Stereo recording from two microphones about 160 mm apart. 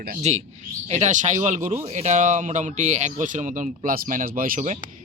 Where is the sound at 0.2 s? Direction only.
45° right (ahead or behind).